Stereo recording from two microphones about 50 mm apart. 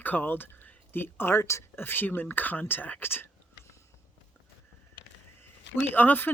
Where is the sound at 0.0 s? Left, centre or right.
Left.